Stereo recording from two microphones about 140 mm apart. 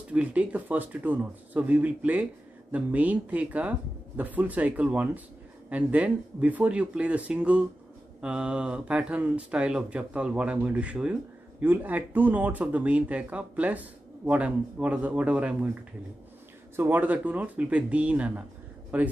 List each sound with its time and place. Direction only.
0.1 s speech: 10° right (ahead or behind)
16.7 s speech: 15° right (ahead or behind)